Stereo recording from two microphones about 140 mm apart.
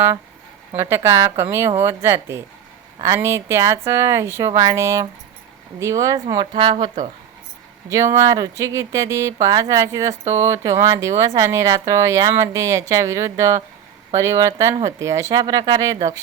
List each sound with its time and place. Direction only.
0.8 s a woman's voice: 20° right (ahead or behind)
6.2 s speech: 35° right (ahead or behind)
7.9 s speech: 20° right (ahead or behind)